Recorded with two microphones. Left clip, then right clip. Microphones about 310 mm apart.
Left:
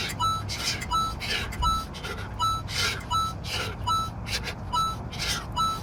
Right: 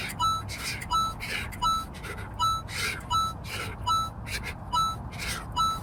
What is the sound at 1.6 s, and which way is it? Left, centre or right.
Vehicle, centre.